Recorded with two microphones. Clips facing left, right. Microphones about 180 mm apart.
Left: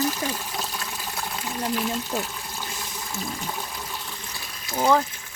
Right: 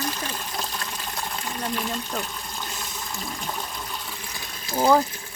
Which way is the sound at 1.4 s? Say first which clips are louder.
Left 3 dB; 10° left (ahead or behind).